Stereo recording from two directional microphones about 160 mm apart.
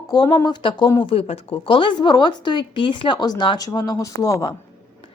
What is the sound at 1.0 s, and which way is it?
A woman's voice, 40° left (ahead or behind).